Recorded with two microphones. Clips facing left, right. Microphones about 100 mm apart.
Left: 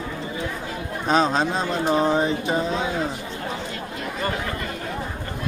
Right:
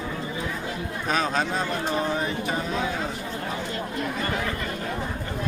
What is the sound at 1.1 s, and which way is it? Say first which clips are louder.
Speech: left 5 dB; 25° left (ahead or behind).